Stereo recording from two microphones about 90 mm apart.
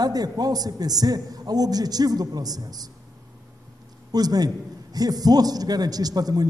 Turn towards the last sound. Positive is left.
turn(degrees=-45)  # may be behind; listen again after turning